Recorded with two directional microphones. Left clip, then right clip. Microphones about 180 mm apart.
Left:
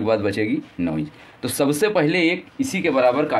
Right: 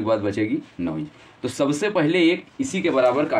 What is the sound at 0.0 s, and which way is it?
Speech, 55° left (ahead or behind).